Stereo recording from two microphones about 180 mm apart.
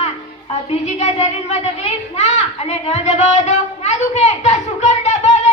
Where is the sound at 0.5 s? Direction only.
35° left (ahead or behind).